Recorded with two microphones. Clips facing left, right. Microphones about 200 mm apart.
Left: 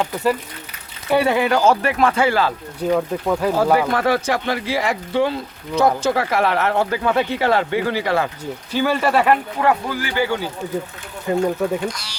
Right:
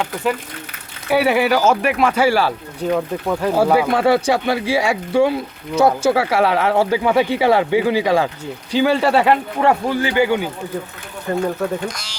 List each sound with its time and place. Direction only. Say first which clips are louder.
1.1 s speech: right 1 dB; 5° right (ahead or behind)
9.0 s speech: right 2 dB; 30° right (ahead or behind)
11.3 s speech: left 1 dB; 10° left (ahead or behind)